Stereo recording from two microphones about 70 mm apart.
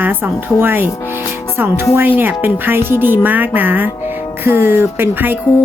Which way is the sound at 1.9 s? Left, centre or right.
Right.